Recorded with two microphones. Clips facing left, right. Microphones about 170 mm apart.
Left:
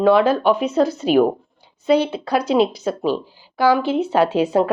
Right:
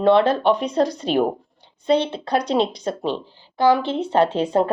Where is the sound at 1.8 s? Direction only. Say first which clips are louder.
Left 2 dB; 30° right (ahead or behind).